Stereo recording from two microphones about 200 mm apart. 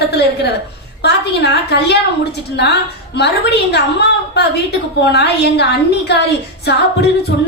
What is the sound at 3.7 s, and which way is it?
A woman's voice, 55° left (ahead or behind).